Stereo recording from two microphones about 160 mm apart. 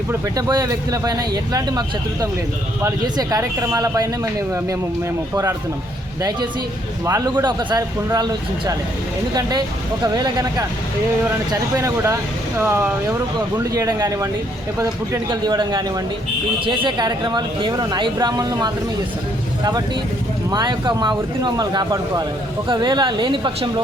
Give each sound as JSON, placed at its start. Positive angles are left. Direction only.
{"t": 0.1, "sound": "speech", "side_deg": -25}
{"t": 2.8, "sound": "speech", "side_deg": -20}
{"t": 5.3, "sound": "speech", "side_deg": -20}
{"t": 7.0, "sound": "speech", "side_deg": -20}
{"t": 11.8, "sound": "speech", "side_deg": -20}
{"t": 20.5, "sound": "speech", "side_deg": -30}